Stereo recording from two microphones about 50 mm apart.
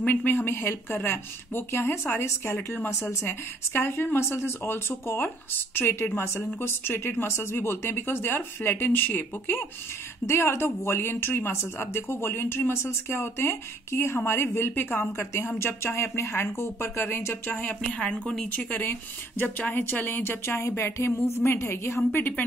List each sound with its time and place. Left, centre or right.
0.0 s a woman's voice: left
3.0 s a woman's voice: left
10.2 s a woman's voice: left
15.1 s speech: left
17.5 s a woman's voice: left
17.8 s a woman's voice: centre
18.6 s a woman's voice: left
18.9 s a woman's voice: left
21.5 s speech: left